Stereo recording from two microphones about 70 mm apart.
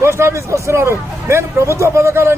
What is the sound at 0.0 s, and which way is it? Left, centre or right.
Speech, right.